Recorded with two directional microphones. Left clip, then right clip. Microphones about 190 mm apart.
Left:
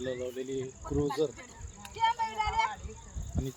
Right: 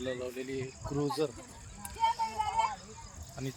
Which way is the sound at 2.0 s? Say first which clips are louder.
Left 2 dB; 35° right (ahead or behind).